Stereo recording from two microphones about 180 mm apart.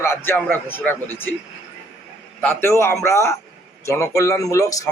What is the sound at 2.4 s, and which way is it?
A man's voice, 15° left (ahead or behind).